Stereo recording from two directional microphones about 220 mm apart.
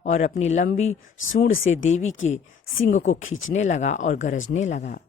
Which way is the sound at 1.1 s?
65° left (ahead or behind).